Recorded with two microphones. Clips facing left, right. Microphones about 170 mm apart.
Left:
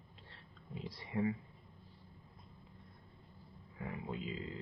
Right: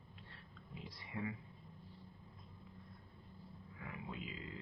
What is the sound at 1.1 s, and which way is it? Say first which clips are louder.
Speech: left 8 dB; 35° left (ahead or behind).